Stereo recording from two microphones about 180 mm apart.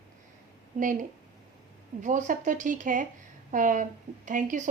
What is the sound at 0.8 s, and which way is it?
A woman's voice, 45° right (ahead or behind).